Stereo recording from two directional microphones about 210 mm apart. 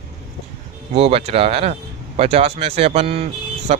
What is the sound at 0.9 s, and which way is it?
A man's voice, 25° right (ahead or behind).